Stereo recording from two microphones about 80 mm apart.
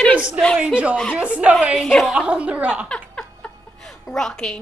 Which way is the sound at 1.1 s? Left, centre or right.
Centre.